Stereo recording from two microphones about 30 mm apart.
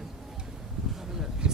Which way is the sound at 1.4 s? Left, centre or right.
Right.